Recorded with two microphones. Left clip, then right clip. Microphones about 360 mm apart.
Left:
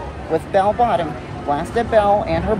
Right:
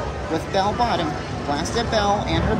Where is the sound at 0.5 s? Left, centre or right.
Centre.